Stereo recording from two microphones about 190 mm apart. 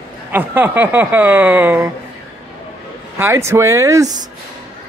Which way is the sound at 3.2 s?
15° right (ahead or behind).